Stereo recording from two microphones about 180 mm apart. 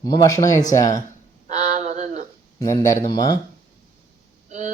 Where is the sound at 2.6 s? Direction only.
15° left (ahead or behind).